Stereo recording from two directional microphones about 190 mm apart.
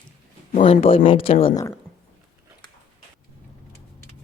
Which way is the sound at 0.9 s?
30° left (ahead or behind).